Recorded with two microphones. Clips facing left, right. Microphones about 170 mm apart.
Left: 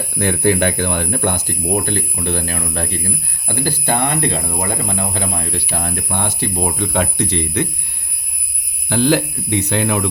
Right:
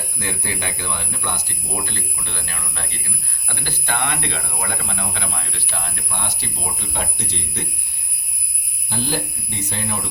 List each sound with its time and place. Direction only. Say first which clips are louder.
0.2 s speech: left 14 dB; 60° left (ahead or behind)
8.9 s speech: left 10 dB; 80° left